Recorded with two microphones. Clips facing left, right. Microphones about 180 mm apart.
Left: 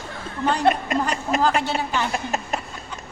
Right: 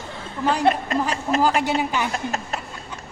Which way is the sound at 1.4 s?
10° right (ahead or behind).